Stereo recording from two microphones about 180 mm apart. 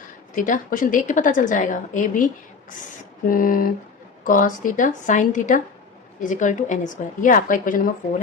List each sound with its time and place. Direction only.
0.3 s a woman's voice: 50° left (ahead or behind)